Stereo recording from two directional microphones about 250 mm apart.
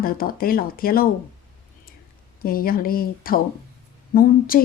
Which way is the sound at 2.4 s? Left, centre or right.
Left.